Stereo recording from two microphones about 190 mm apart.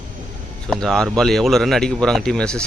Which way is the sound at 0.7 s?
Centre (ahead or behind).